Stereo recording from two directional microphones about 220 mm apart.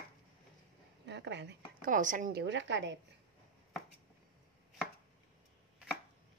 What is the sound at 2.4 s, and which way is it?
Speech, 55° right (ahead or behind).